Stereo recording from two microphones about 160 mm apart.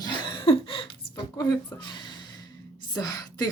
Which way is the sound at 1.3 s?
20° left (ahead or behind).